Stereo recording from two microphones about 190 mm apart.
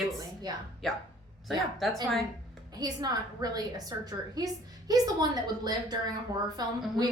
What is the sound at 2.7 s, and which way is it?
A woman's voice, 20° right (ahead or behind).